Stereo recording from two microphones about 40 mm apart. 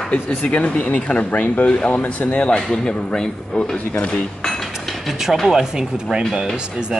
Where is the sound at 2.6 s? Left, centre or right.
Centre; by 4.2 s left.